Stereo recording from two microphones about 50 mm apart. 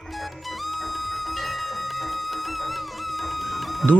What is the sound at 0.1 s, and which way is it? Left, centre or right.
Music, centre.